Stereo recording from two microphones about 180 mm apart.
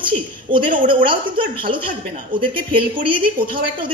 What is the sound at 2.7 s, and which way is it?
Speech, 30° right (ahead or behind).